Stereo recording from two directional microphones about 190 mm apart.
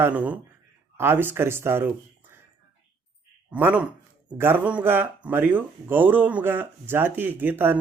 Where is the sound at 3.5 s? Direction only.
10° right (ahead or behind).